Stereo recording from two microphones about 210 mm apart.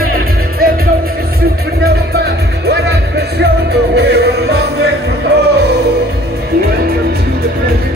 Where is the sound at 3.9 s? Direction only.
55° right (ahead or behind).